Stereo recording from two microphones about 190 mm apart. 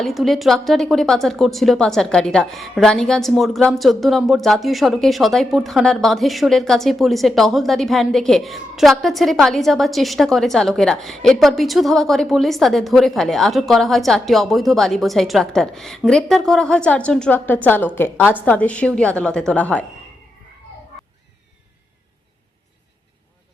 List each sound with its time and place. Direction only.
0.0 s a woman's voice: centre (ahead or behind)